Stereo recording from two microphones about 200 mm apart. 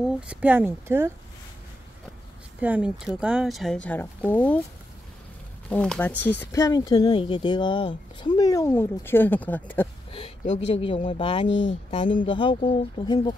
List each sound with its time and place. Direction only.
0.3 s speech: 10° right (ahead or behind)
2.6 s speech: 5° right (ahead or behind)
5.7 s speech: 5° left (ahead or behind)
10.1 s speech: 35° left (ahead or behind)
11.4 s speech: 65° left (ahead or behind)
12.0 s speech: 40° left (ahead or behind)
12.3 s speech: 25° left (ahead or behind)